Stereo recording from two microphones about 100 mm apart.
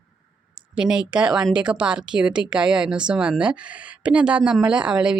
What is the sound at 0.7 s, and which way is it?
A woman's voice, 10° right (ahead or behind).